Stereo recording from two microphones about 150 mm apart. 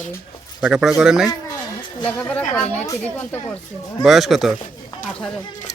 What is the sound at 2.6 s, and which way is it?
Speech, 50° left (ahead or behind).